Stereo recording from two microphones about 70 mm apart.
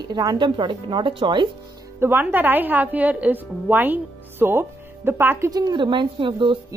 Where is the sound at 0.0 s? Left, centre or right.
Right.